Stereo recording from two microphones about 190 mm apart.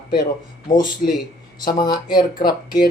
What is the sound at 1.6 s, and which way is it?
Speech, 20° left (ahead or behind).